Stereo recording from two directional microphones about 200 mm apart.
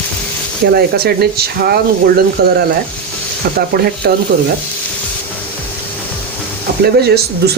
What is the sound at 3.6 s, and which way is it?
Speech, 50° right (ahead or behind).